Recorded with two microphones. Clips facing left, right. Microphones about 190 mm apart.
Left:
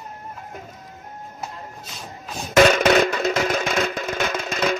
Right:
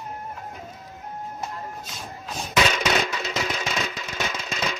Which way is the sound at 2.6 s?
50° left (ahead or behind).